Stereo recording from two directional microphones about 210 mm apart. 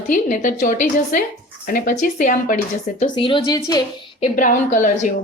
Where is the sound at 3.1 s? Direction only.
25° left (ahead or behind).